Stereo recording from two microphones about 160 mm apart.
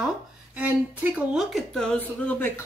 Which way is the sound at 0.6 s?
10° right (ahead or behind).